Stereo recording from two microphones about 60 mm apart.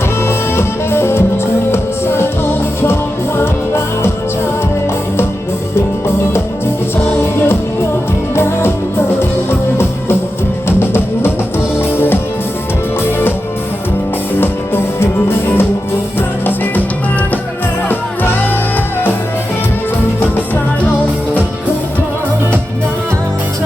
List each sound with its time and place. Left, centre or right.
0.3 s music: left
3.3 s music: left
8.4 s music: left
10.7 s music: left
14.3 s music: left